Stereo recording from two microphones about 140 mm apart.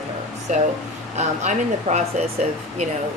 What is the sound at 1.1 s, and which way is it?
Speech, 55° right (ahead or behind).